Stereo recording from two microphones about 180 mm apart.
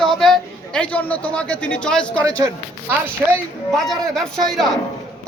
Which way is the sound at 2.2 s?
20° right (ahead or behind).